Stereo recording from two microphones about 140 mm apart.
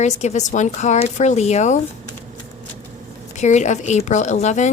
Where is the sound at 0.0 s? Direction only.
55° left (ahead or behind).